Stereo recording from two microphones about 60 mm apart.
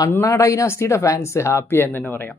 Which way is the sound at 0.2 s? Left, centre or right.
Left.